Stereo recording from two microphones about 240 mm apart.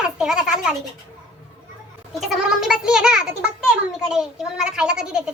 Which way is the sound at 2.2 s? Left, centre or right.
Centre.